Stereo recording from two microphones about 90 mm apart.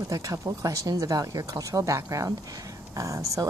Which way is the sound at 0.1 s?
40° right (ahead or behind).